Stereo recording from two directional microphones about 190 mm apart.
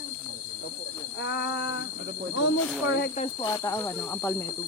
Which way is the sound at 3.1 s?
35° left (ahead or behind).